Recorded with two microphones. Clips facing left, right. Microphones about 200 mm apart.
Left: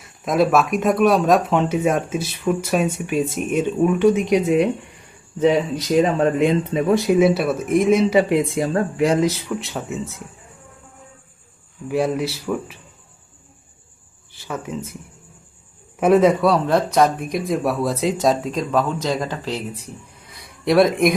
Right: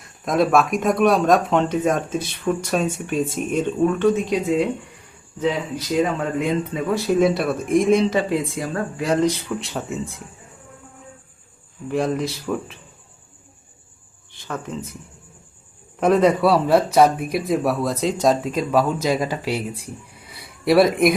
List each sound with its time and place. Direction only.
0.3 s speech: centre (ahead or behind); by 4.7 s 20° left (ahead or behind)
6.3 s speech: 25° left (ahead or behind)
7.1 s speech: 5° left (ahead or behind)
8.3 s speech: 25° left (ahead or behind)
9.1 s speech: 5° left (ahead or behind)
11.9 s speech: 5° left (ahead or behind)
14.3 s speech: 5° left (ahead or behind)
16.0 s speech: 5° left (ahead or behind)